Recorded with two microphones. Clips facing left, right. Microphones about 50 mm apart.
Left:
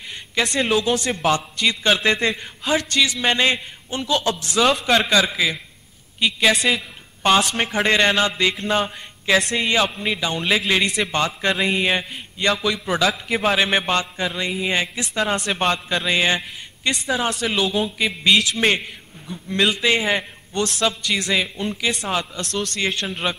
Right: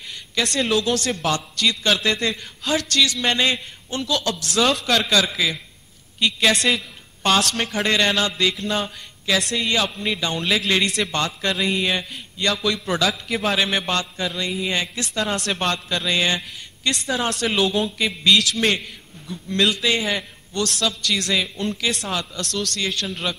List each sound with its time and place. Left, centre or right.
0.1 s a man's voice: centre
4.5 s a man's voice: centre
10.0 s a man's voice: centre
12.6 s a man's voice: centre
15.2 s a man's voice: centre